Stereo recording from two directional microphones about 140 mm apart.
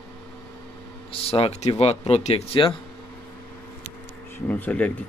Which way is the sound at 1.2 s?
45° left (ahead or behind).